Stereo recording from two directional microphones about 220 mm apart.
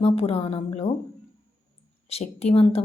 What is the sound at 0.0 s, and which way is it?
Speech, 25° left (ahead or behind).